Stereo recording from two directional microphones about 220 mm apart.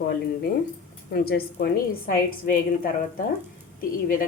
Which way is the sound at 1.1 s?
45° left (ahead or behind).